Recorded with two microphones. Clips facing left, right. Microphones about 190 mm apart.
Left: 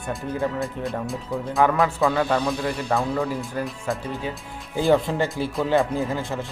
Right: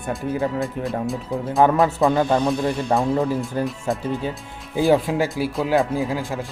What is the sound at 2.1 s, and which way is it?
A man's voice, 25° right (ahead or behind).